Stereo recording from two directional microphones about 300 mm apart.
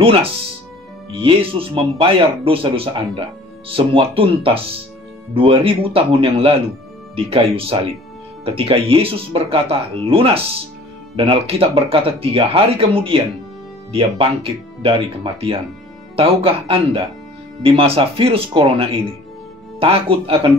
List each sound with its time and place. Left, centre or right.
0.0 s speech: centre
16.2 s speech: centre